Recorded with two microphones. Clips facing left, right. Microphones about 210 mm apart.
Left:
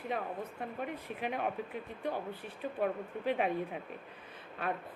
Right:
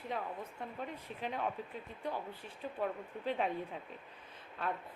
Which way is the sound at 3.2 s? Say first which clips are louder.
Left 4 dB; 15° left (ahead or behind).